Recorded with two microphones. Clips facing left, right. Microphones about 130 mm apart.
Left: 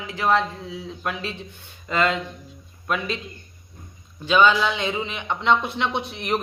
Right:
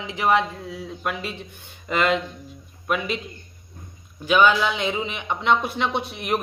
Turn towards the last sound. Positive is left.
turn(degrees=-10)  # may be behind; listen again after turning